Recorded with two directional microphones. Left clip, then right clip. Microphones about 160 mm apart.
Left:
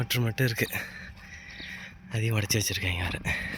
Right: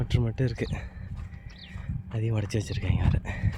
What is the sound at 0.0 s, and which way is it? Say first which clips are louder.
Speech: left 3 dB; 15° right (ahead or behind).